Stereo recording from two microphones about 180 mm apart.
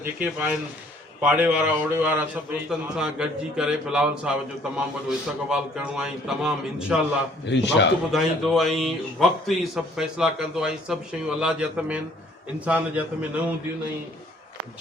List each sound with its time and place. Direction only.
0.0 s a man's voice: 10° right (ahead or behind)
7.4 s a man's voice: 80° left
8.1 s a man's voice: centre (ahead or behind)